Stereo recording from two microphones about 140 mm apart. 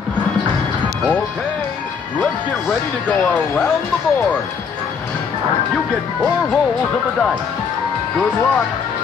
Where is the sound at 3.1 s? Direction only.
10° left (ahead or behind).